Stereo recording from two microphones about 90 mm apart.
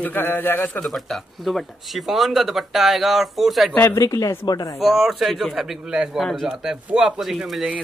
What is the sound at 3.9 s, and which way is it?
Speech, 40° left (ahead or behind).